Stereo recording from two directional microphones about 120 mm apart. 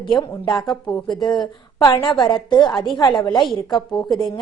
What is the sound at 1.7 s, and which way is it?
Speech, 30° left (ahead or behind).